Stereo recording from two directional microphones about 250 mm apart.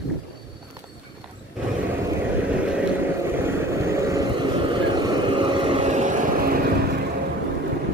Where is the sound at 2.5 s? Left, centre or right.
Centre; by 7.0 s right.